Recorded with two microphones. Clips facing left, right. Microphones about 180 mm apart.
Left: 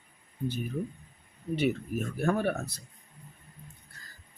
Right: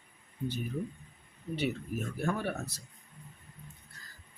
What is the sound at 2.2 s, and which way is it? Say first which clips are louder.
Speech: left 6 dB; 55° left (ahead or behind).